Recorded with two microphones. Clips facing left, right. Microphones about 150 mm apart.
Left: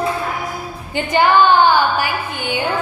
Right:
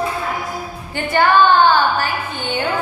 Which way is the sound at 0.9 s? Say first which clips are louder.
Left 1 dB; 15° left (ahead or behind).